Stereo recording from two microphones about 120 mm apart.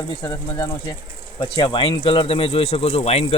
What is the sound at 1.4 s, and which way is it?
Speech, 40° left (ahead or behind).